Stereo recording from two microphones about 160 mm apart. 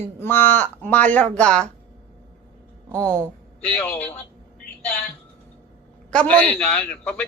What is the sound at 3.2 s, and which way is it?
Speech, 5° left (ahead or behind).